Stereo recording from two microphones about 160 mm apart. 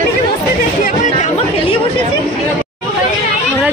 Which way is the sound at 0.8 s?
50° left (ahead or behind).